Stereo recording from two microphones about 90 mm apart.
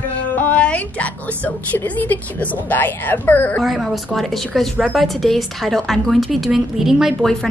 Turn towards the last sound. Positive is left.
turn(degrees=-5)  # may be behind; listen again after turning